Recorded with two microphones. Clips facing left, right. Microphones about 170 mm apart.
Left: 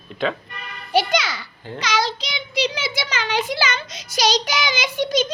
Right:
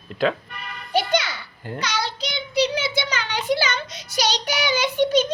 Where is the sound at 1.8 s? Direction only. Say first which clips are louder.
Left 4 dB; 90° left.